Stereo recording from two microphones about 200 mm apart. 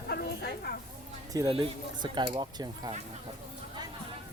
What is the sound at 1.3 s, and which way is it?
Speech, 15° right (ahead or behind).